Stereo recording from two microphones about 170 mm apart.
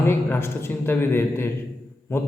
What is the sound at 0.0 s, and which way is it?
A man's voice, 15° left (ahead or behind).